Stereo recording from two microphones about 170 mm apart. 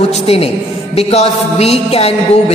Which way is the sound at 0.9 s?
35° left (ahead or behind).